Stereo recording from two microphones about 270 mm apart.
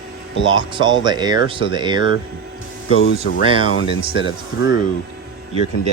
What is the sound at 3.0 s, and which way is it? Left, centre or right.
Speech, left.